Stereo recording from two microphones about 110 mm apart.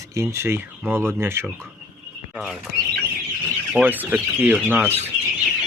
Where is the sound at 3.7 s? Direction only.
15° right (ahead or behind).